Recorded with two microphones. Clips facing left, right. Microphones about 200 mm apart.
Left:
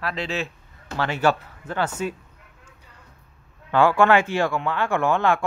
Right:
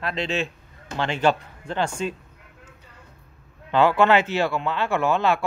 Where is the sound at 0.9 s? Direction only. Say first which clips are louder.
Even; 20° right (ahead or behind).